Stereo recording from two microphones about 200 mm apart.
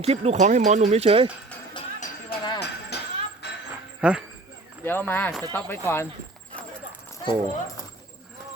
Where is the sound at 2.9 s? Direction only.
55° left (ahead or behind).